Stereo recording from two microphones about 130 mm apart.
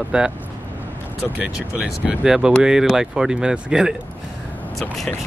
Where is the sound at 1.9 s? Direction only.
5° right (ahead or behind).